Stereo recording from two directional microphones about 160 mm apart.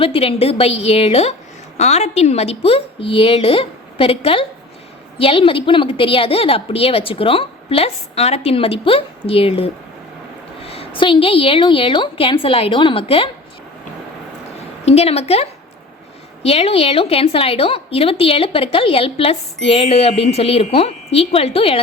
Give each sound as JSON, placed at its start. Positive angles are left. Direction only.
{"t": 0.0, "sound": "a woman's voice", "side_deg": 35}
{"t": 14.8, "sound": "a woman's voice", "side_deg": 40}